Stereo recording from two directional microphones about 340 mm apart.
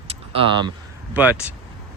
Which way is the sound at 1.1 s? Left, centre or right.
Centre.